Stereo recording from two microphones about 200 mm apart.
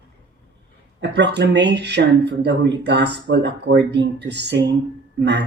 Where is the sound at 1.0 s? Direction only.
60° right (ahead or behind).